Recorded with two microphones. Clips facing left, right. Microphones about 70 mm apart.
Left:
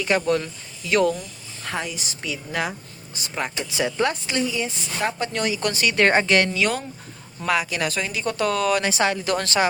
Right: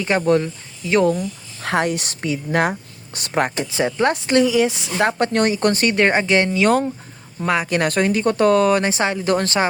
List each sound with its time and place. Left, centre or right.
0.0 s speech: right
1.6 s a woman's voice: right
3.6 s speech: right
4.1 s a woman's voice: right
5.2 s speech: right
6.0 s speech: centre
7.7 s speech: right